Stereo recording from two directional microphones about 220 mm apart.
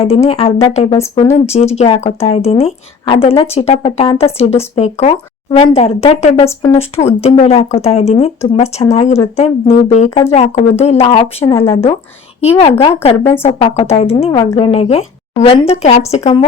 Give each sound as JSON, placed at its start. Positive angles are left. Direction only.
{"t": 0.0, "sound": "speech", "side_deg": 25}
{"t": 6.6, "sound": "speech", "side_deg": 10}
{"t": 6.9, "sound": "speech", "side_deg": 30}